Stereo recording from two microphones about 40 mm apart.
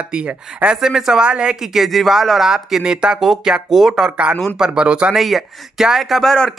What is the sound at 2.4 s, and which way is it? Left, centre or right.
Speech, centre.